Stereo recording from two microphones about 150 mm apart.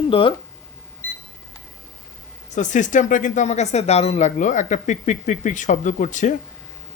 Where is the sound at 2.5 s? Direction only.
55° left (ahead or behind).